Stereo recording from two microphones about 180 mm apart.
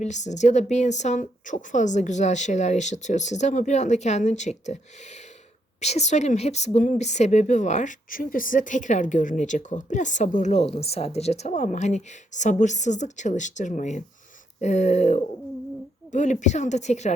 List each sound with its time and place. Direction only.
0.0 s speech: 40° left (ahead or behind)